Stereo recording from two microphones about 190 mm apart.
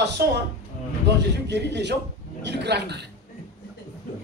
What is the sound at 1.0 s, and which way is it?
A man's voice, 65° right (ahead or behind).